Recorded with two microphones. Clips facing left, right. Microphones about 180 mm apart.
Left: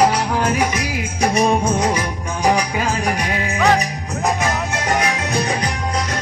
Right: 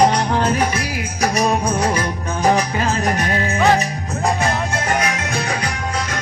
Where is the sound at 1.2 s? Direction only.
30° left (ahead or behind); by 3.6 s 10° left (ahead or behind).